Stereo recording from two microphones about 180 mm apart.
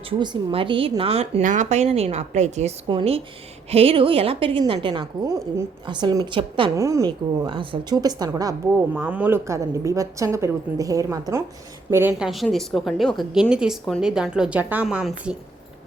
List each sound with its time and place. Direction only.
0.1 s a woman's voice: 30° right (ahead or behind)
9.0 s a woman's voice: 10° right (ahead or behind)